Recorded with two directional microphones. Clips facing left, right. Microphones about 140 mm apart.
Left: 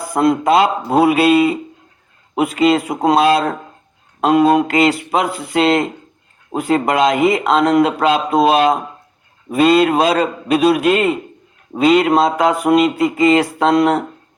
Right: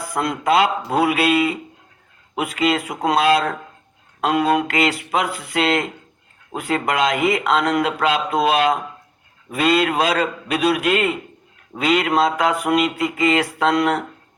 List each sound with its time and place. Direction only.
0.0 s speech: 30° left (ahead or behind)